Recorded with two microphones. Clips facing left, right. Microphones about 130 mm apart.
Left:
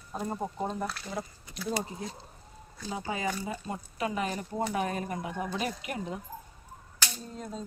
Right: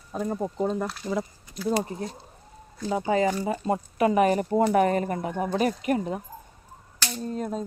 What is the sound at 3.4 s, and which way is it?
Speech, 60° right (ahead or behind).